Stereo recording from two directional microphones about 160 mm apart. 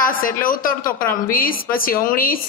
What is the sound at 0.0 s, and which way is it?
A woman's voice, 60° left (ahead or behind).